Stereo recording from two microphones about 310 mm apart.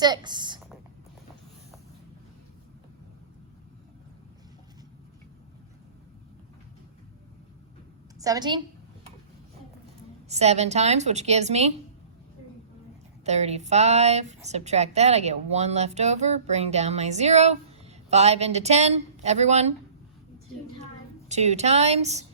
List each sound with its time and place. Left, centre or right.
0.0 s speech: centre
8.2 s speech: centre
10.2 s a woman's voice: right
13.2 s a woman's voice: right
21.2 s a woman's voice: right